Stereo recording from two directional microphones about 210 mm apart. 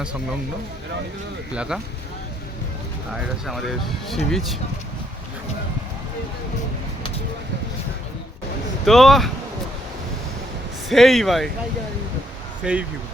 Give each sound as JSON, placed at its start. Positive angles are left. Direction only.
{"t": 1.5, "sound": "speech", "side_deg": -5}
{"t": 3.4, "sound": "speech", "side_deg": 0}
{"t": 8.9, "sound": "speech", "side_deg": 0}
{"t": 10.8, "sound": "speech", "side_deg": 0}
{"t": 12.6, "sound": "speech", "side_deg": -5}